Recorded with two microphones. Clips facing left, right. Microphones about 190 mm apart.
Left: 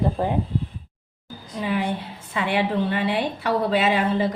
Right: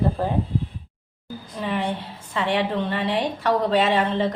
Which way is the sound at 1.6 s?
5° left (ahead or behind).